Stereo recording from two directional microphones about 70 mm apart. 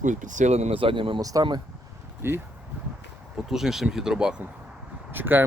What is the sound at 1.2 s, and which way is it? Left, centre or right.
Speech, right.